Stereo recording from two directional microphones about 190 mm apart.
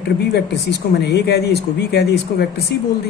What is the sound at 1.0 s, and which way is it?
Speech, 60° left (ahead or behind).